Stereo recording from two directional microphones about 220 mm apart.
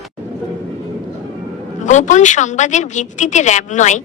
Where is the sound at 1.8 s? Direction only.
35° left (ahead or behind).